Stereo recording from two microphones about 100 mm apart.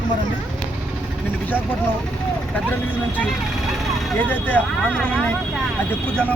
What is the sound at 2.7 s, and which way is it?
Speech, 15° left (ahead or behind).